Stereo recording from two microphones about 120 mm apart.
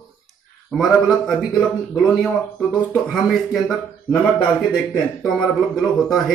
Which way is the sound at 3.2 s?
Centre (ahead or behind).